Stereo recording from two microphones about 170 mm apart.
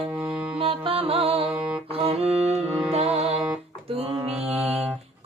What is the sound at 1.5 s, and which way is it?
Music, 5° right (ahead or behind).